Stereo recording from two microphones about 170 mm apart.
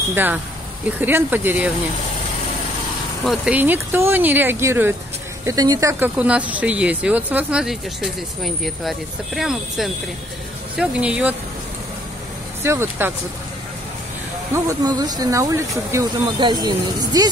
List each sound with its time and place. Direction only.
0.1 s speech: 10° right (ahead or behind)
3.3 s speech: 10° right (ahead or behind)
12.6 s speech: 15° right (ahead or behind)
14.5 s speech: 20° right (ahead or behind)